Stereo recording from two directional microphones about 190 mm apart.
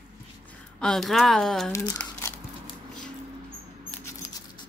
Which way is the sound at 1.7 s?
15° left (ahead or behind).